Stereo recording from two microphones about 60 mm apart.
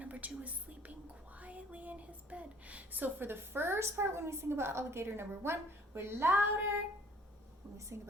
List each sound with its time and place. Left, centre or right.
0.0 s speech: right
7.9 s a woman's voice: right